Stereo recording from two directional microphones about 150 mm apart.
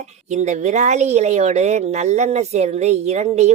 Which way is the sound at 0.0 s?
50° right (ahead or behind).